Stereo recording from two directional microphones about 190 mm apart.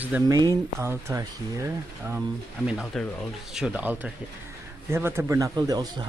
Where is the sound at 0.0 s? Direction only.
10° right (ahead or behind).